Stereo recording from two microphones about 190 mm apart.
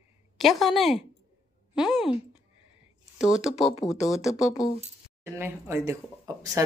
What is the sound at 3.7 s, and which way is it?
Speech, 15° left (ahead or behind).